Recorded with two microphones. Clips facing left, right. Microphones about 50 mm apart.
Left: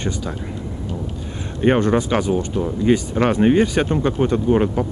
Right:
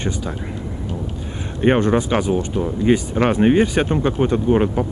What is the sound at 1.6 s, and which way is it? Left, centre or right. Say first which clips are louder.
Speech: even; centre.